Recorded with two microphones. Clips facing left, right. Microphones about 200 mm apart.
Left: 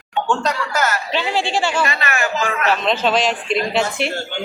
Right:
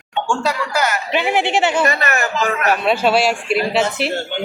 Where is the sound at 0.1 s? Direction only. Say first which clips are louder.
Even; 10° right (ahead or behind).